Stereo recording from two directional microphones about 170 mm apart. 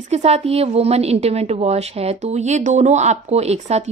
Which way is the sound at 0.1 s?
40° right (ahead or behind).